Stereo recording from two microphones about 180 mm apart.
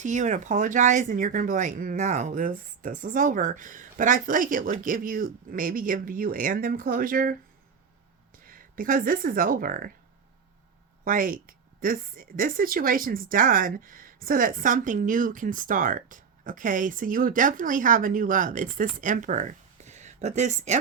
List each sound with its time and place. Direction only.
0.0 s speech: 45° right (ahead or behind)
8.4 s speech: 50° right (ahead or behind)
11.0 s speech: 50° right (ahead or behind)